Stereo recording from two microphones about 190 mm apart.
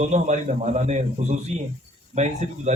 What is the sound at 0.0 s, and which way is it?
Speech, 40° right (ahead or behind).